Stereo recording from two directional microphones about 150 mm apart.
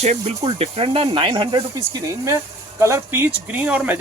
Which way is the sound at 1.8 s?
20° right (ahead or behind).